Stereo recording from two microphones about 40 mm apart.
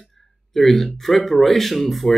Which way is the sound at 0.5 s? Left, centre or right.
Centre.